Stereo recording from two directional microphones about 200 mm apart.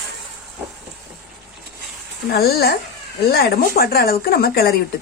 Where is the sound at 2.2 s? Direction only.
50° left (ahead or behind).